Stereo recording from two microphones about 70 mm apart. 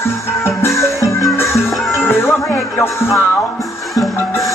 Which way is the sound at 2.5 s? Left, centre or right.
Left.